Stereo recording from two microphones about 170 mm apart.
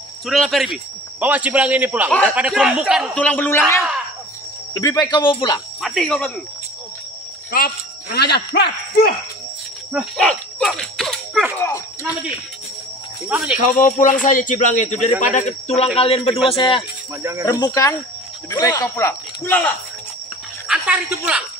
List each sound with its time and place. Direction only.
0.3 s a man's voice: centre (ahead or behind)
3.2 s speech: 10° left (ahead or behind); by 5.6 s 25° left (ahead or behind)
5.8 s speech: centre (ahead or behind)
7.5 s speech: 65° left (ahead or behind)
9.9 s a sound: centre (ahead or behind)
11.5 s a sound: 15° left (ahead or behind)
13.3 s a man's voice: 5° right (ahead or behind)
13.6 s speech: 50° left (ahead or behind); by 16.8 s 30° left (ahead or behind)
17.2 s a man's voice: 15° right (ahead or behind)
17.5 s speech: 20° left (ahead or behind)
20.6 s speech: 5° right (ahead or behind)